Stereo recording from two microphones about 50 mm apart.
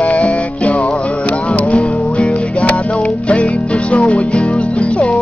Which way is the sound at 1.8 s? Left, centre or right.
Centre.